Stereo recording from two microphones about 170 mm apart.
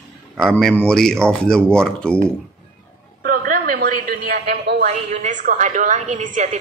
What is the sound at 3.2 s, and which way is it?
A man's voice, 55° right (ahead or behind).